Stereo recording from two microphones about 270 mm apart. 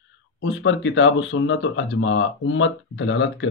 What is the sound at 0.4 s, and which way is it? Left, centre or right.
Speech, left.